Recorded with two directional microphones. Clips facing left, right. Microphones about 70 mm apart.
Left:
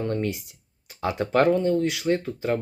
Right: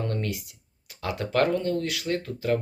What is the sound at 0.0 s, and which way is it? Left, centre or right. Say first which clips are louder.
Speech: left 4 dB; left.